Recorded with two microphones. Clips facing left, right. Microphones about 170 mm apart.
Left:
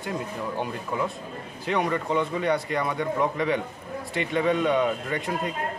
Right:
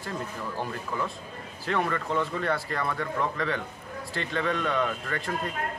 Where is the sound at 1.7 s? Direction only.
5° left (ahead or behind).